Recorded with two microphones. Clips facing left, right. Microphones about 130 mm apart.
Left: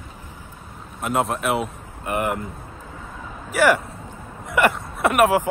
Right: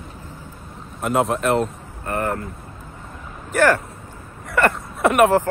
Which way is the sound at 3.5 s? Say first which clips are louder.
Right 1 dB; 10° left (ahead or behind).